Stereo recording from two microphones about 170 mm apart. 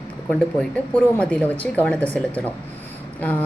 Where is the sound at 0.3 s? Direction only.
5° left (ahead or behind).